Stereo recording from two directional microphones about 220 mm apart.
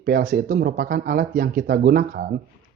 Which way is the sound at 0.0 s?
40° right (ahead or behind).